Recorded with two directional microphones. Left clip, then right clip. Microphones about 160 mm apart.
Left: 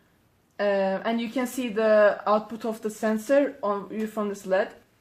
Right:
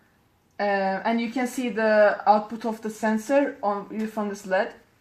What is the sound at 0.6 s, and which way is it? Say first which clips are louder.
Speech: even; 25° left (ahead or behind).